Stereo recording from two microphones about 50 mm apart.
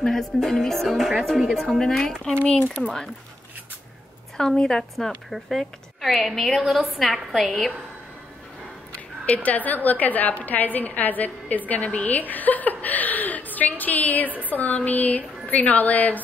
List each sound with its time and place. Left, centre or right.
0.0 s speech: centre
4.4 s a woman's voice: centre
8.9 s a woman's voice: left